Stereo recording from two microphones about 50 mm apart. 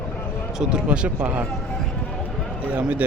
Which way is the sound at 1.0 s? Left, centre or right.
Right.